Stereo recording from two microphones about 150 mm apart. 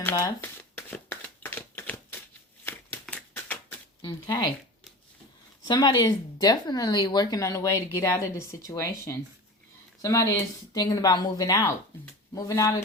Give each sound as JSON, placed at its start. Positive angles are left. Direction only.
{"t": 0.1, "sound": "speech", "side_deg": 25}
{"t": 0.4, "sound": "shuffling cards", "side_deg": 15}
{"t": 2.6, "sound": "a sound", "side_deg": 10}
{"t": 4.0, "sound": "speech", "side_deg": 30}
{"t": 5.6, "sound": "speech", "side_deg": 30}